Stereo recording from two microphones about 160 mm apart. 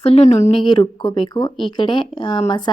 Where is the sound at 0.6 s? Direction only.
30° left (ahead or behind).